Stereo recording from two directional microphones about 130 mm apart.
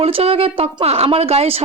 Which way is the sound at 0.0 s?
50° right (ahead or behind).